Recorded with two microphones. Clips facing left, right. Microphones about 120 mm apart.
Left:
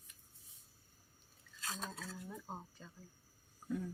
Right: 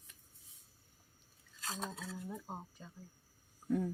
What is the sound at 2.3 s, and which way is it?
Speech, 15° right (ahead or behind).